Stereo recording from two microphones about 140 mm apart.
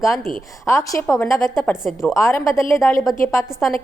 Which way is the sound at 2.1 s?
20° left (ahead or behind).